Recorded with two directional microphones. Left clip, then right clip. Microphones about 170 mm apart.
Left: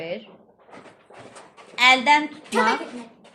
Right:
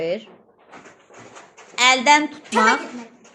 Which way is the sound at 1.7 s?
35° right (ahead or behind).